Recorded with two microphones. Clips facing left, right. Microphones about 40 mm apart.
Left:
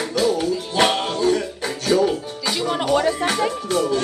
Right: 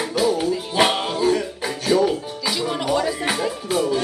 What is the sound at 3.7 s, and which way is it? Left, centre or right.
Music, centre.